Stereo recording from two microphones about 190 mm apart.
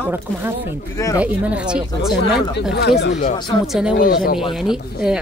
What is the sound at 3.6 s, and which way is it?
Speech, centre (ahead or behind).